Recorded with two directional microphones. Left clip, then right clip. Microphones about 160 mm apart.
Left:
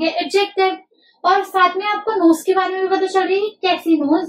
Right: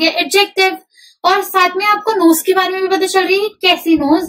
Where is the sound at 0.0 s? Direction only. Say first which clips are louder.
Right 5 dB; 20° right (ahead or behind).